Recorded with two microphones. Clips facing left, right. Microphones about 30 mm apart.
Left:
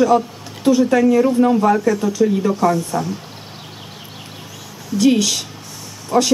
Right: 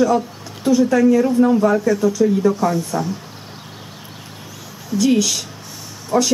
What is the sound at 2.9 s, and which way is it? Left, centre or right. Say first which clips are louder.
Speech: left 1 dB; centre.